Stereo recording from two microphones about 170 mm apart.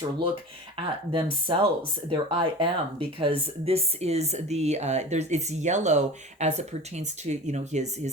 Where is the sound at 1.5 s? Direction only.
30° right (ahead or behind).